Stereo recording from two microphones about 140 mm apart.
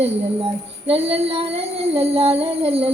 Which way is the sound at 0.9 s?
45° right (ahead or behind).